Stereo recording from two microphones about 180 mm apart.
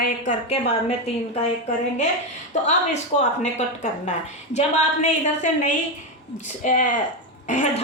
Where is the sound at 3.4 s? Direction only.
40° left (ahead or behind).